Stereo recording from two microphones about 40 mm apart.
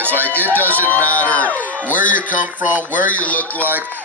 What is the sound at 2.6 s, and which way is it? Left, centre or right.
Speech, right.